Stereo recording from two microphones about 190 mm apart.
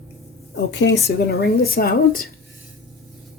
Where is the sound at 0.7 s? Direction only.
70° left (ahead or behind).